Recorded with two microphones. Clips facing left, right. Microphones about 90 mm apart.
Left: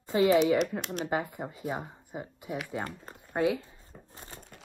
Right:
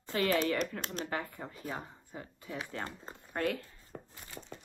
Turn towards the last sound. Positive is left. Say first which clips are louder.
# left 4 dB
turn(degrees=35)  # may be behind; listen again after turning